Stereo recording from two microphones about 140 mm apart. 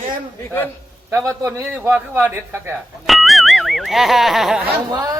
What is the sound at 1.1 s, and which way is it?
A man's voice, 20° right (ahead or behind).